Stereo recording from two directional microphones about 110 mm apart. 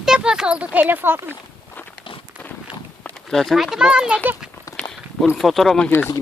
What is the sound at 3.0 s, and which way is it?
Speech, centre (ahead or behind).